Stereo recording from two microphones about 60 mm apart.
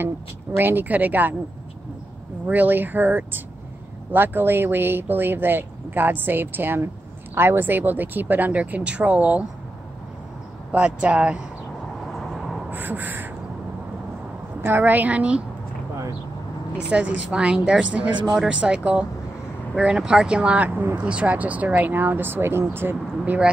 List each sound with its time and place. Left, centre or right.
0.0 s speech: right
2.4 s speech: right
10.7 s speech: right
12.1 s vehicle: centre
12.7 s crow: right
14.6 s speech: right
16.7 s speech: right